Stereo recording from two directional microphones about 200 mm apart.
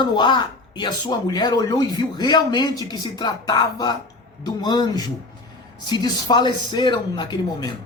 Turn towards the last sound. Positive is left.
turn(degrees=20)  # may be behind; listen again after turning